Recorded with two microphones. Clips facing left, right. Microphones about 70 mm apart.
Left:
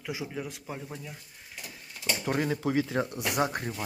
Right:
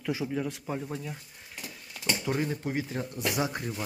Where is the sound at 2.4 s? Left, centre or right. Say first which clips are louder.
Left 3 dB; left.